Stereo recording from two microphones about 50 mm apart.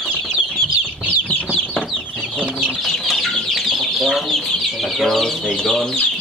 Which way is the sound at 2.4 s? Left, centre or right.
Right.